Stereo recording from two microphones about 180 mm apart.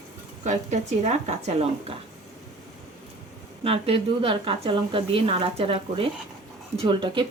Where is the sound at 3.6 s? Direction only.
30° right (ahead or behind).